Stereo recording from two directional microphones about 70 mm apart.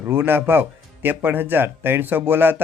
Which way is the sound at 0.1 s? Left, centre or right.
Right.